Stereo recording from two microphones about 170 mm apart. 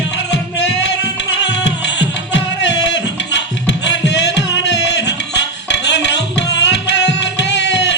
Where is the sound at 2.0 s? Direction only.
90° left.